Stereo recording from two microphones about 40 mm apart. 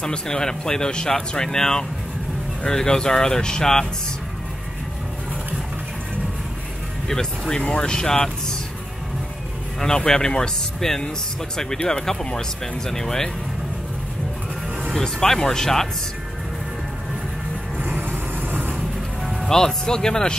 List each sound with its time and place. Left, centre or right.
0.0 s speech: centre
7.1 s speech: centre
9.8 s speech: centre
12.8 s speech: centre
15.0 s speech: centre
18.0 s vehicle: right
19.4 s speech: centre